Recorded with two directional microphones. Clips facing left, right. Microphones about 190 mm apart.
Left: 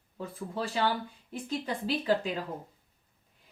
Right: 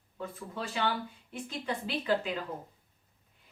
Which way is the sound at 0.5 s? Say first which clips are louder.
Left 3 dB; 35° left (ahead or behind).